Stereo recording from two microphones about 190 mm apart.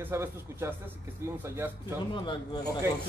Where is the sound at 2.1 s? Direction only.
25° left (ahead or behind).